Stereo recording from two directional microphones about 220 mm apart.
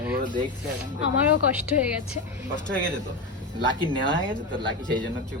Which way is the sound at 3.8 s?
20° left (ahead or behind).